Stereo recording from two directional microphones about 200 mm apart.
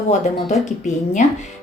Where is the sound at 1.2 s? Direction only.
35° left (ahead or behind).